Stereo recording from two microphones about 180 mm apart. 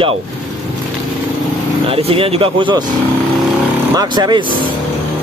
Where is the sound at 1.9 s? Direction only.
30° right (ahead or behind).